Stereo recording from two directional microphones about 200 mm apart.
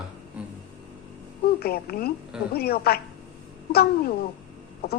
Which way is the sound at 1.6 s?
50° left (ahead or behind).